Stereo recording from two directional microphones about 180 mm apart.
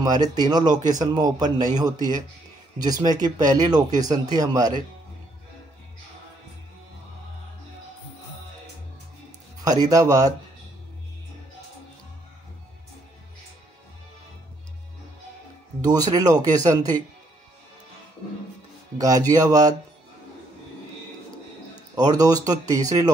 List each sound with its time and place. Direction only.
0.0 s speech: 20° right (ahead or behind)
2.8 s speech: 20° right (ahead or behind)
9.6 s speech: 20° right (ahead or behind)
15.8 s speech: 20° right (ahead or behind)
18.9 s speech: 20° right (ahead or behind)
21.9 s speech: 20° right (ahead or behind)